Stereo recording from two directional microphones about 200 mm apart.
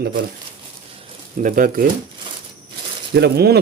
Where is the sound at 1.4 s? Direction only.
45° right (ahead or behind).